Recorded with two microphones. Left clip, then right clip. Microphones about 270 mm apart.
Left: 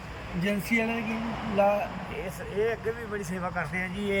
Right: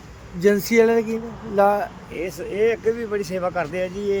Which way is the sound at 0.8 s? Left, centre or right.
Right.